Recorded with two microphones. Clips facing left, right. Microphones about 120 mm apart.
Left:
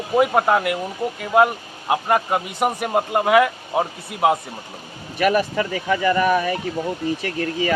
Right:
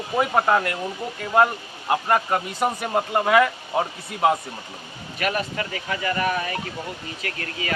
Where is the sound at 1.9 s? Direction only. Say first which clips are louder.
Left 2 dB; 5° left (ahead or behind).